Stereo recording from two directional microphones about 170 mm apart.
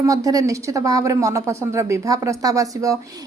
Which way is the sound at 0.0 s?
20° right (ahead or behind).